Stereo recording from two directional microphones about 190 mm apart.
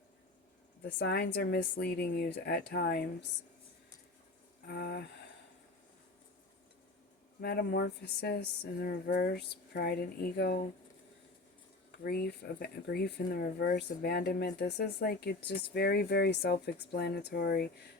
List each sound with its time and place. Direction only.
0.9 s speech: 60° left (ahead or behind)
4.6 s speech: 60° left (ahead or behind)
7.4 s speech: 60° left (ahead or behind)
12.0 s speech: 55° left (ahead or behind)